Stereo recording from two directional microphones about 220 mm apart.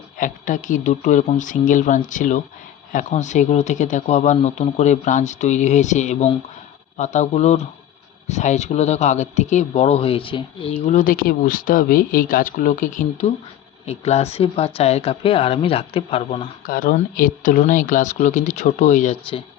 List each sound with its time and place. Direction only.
0.2 s speech: 35° left (ahead or behind)
16.6 s speech: 40° left (ahead or behind)